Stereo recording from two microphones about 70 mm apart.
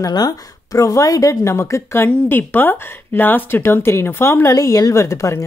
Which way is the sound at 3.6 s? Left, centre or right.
Left.